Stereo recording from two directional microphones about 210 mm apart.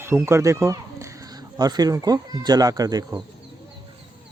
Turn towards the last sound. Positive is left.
turn(degrees=-15)  # may be behind; listen again after turning